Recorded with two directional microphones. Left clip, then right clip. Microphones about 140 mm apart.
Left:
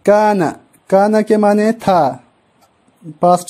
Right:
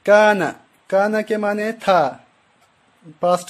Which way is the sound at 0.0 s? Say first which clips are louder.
Left 2 dB; 40° left (ahead or behind).